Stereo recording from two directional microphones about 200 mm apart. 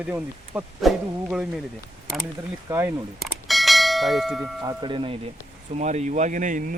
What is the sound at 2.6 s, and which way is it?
Speech, 15° right (ahead or behind).